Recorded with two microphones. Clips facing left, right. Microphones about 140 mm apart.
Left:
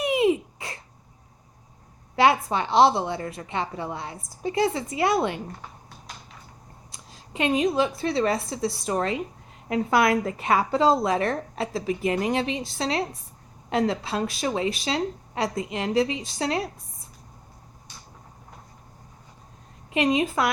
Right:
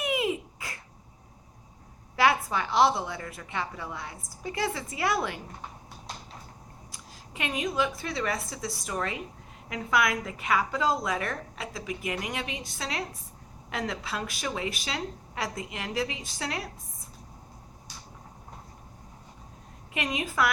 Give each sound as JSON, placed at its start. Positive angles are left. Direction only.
{"t": 0.0, "sound": "a sound", "side_deg": 25}
{"t": 2.1, "sound": "speech", "side_deg": 25}
{"t": 6.9, "sound": "a woman's voice", "side_deg": 25}
{"t": 19.9, "sound": "speech", "side_deg": 25}